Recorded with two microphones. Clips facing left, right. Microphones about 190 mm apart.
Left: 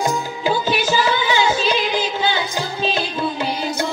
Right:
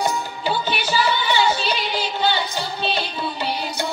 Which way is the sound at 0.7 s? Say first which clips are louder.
Left 3 dB; 90° left.